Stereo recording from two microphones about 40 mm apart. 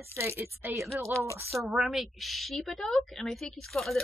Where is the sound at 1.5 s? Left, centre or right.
Right.